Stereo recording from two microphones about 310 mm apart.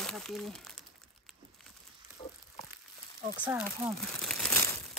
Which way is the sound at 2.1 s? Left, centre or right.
Centre.